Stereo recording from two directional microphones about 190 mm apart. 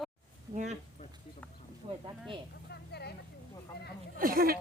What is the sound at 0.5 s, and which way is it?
Speech, 40° right (ahead or behind).